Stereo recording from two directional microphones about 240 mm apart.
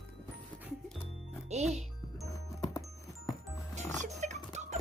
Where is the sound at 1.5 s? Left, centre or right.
Right.